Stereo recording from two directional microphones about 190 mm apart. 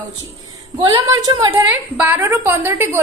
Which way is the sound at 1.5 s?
10° right (ahead or behind).